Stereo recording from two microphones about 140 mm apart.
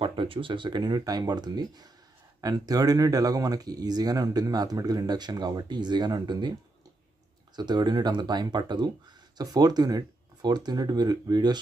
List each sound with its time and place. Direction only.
0.0 s speech: 40° right (ahead or behind)
7.5 s speech: 30° right (ahead or behind)